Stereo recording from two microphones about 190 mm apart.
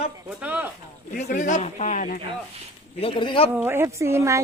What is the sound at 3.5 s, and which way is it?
Speech, 10° right (ahead or behind).